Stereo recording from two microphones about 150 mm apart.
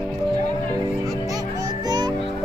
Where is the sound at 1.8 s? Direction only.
30° right (ahead or behind).